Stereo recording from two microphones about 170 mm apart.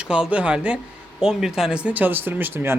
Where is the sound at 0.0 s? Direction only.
5° right (ahead or behind).